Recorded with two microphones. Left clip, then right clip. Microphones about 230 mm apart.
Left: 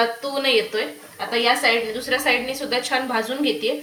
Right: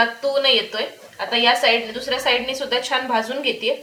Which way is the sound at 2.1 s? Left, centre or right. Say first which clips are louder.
Right 1 dB; right.